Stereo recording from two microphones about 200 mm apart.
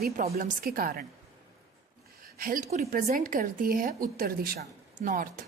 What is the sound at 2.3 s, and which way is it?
A woman's voice, 45° right (ahead or behind).